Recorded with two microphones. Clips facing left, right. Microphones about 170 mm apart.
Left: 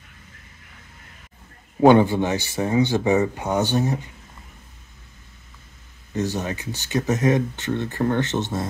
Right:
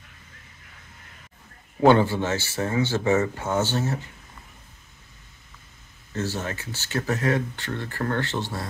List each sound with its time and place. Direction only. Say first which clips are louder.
1.8 s speech: left 3 dB; 15° left (ahead or behind)
6.1 s speech: left 4 dB; 15° left (ahead or behind)